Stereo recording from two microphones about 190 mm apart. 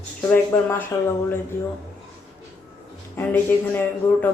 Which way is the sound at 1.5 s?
45° left (ahead or behind).